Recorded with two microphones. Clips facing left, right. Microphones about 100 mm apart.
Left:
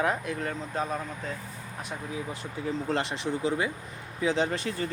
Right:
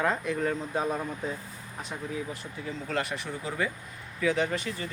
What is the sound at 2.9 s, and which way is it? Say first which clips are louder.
Speech: left 1 dB; 25° left (ahead or behind).